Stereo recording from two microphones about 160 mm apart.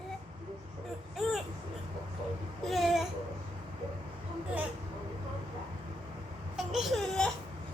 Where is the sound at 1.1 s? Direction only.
Centre (ahead or behind).